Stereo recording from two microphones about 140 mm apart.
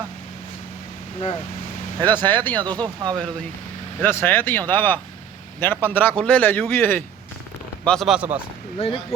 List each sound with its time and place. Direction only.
2.0 s a man's voice: 15° left (ahead or behind)
2.6 s speech: 35° right (ahead or behind)
4.0 s a man's voice: 15° left (ahead or behind)
7.9 s speech: centre (ahead or behind)
8.8 s speech: 50° left (ahead or behind)